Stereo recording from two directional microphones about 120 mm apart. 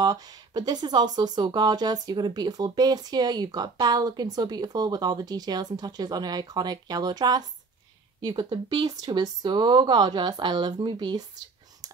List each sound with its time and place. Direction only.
0.0 s speech: 35° right (ahead or behind)